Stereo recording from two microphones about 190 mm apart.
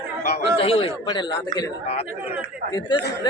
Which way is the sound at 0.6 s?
30° left (ahead or behind).